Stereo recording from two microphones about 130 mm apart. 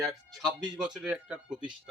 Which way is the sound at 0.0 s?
Centre (ahead or behind).